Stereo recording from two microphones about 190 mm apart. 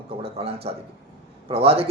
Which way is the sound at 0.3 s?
30° right (ahead or behind).